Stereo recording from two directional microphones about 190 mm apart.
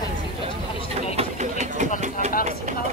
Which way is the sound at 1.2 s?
35° right (ahead or behind).